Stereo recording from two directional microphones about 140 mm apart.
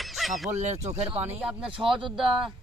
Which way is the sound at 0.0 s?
Centre (ahead or behind).